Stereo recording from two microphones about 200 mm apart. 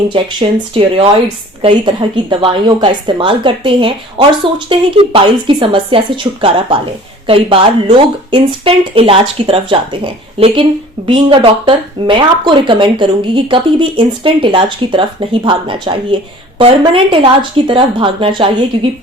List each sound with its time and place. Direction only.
0.1 s speech: 25° right (ahead or behind)